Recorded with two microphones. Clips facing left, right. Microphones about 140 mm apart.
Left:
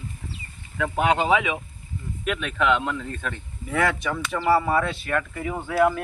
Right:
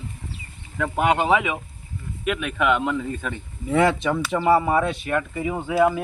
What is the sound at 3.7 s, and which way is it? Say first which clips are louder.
Speech: right 5 dB; 25° right (ahead or behind).